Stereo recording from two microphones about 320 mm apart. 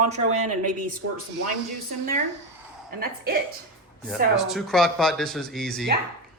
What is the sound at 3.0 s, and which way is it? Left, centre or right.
Speech, right.